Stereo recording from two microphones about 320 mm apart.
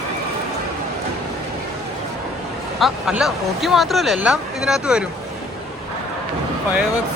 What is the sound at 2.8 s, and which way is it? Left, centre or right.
Speech, centre.